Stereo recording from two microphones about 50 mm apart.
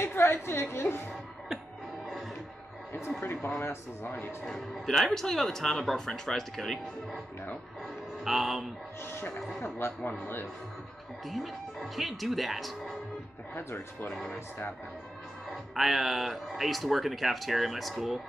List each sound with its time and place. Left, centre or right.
0.0 s a woman's voice: left
3.4 s speech: left
4.5 s speech: centre
8.2 s speech: centre
9.6 s speech: left
11.2 s speech: centre
13.6 s speech: left
14.1 s speech: centre
15.5 s speech: centre